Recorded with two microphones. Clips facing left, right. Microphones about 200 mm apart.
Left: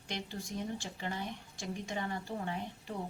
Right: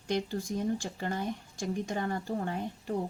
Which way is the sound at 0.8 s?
45° right (ahead or behind).